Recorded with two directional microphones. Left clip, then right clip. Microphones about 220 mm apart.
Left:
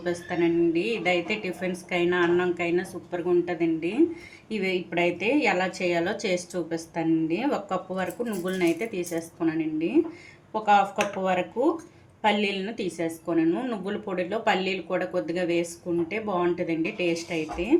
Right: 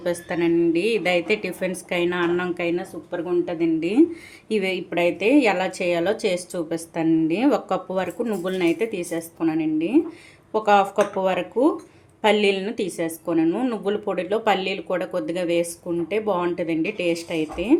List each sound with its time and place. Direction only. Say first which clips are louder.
0.0 s a woman's voice: right 3 dB; 30° right (ahead or behind)